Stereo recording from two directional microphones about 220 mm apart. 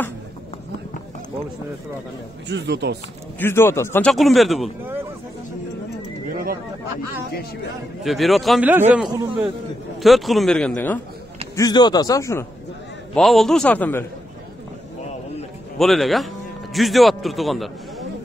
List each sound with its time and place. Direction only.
2.4 s speech: 50° right (ahead or behind)
3.3 s a man's voice: 10° left (ahead or behind)
6.3 s speech: 40° right (ahead or behind)
8.0 s a man's voice: centre (ahead or behind)
11.5 s a man's voice: 20° left (ahead or behind)
13.1 s a man's voice: centre (ahead or behind)
15.8 s a man's voice: centre (ahead or behind)